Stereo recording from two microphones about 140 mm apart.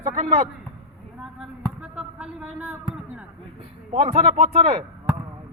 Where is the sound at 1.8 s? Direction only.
5° right (ahead or behind).